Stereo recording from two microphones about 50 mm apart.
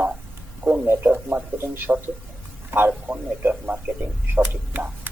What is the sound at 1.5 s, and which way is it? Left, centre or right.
A man's voice, right.